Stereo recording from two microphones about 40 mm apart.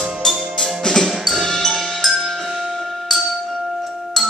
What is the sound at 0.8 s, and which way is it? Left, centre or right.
Percussion, centre.